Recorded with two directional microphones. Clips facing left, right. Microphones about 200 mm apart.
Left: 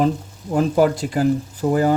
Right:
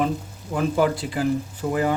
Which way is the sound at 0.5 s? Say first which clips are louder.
Left 4 dB; 45° left (ahead or behind).